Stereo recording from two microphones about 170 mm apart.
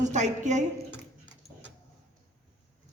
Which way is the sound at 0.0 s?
45° right (ahead or behind).